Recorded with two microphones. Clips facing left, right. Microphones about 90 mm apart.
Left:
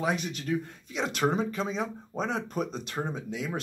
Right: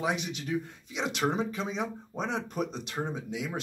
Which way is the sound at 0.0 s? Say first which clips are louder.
Left 2 dB; 15° right (ahead or behind).